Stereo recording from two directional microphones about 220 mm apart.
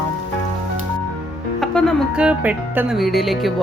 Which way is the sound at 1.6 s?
Centre (ahead or behind).